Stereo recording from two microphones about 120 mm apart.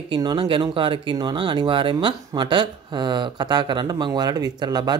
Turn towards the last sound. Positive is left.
turn(degrees=-35)  # may be behind; listen again after turning